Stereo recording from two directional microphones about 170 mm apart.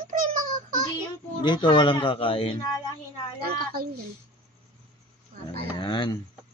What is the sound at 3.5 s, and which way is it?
Speech, 60° right (ahead or behind).